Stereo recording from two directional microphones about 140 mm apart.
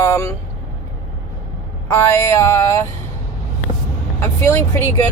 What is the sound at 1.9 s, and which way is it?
Speech, 20° left (ahead or behind).